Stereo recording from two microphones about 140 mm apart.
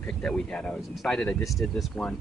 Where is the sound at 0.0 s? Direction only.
5° left (ahead or behind).